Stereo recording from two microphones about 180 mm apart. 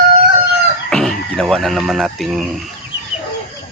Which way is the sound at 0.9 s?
5° left (ahead or behind).